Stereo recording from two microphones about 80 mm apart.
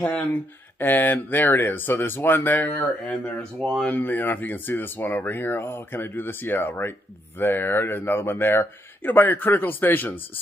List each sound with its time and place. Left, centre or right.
0.3 s speech: left